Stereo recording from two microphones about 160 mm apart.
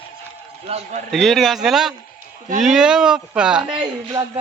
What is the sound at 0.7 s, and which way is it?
Speech, 40° right (ahead or behind).